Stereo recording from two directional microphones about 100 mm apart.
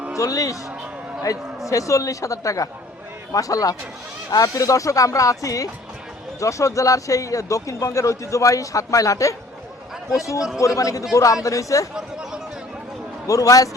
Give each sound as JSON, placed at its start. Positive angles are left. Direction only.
{"t": 0.2, "sound": "speech", "side_deg": 35}
{"t": 13.2, "sound": "speech", "side_deg": 35}